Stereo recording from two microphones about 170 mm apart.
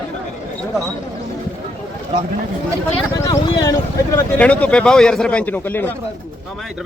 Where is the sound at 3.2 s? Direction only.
20° left (ahead or behind).